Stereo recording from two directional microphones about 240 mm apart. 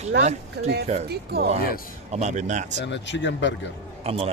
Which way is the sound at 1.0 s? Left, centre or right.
Right.